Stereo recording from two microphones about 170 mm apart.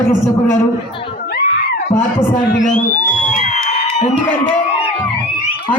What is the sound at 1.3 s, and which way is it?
Screaming, 70° left (ahead or behind).